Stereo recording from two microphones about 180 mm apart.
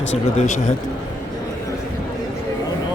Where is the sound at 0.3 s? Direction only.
45° left (ahead or behind).